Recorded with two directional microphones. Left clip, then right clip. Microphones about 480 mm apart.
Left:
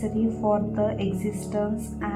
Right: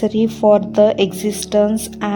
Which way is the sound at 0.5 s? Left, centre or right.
Right.